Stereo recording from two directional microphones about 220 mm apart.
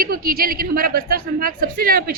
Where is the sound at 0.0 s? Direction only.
40° right (ahead or behind).